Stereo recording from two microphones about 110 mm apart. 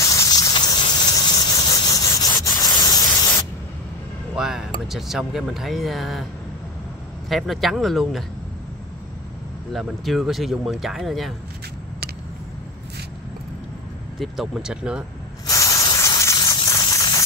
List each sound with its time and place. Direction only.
0.0 s a sound: 30° left (ahead or behind)
4.4 s speech: 5° right (ahead or behind)
7.2 s speech: centre (ahead or behind)
9.7 s speech: centre (ahead or behind)
14.2 s speech: centre (ahead or behind)
15.4 s spray: 30° left (ahead or behind)
16.6 s a sound: 30° left (ahead or behind)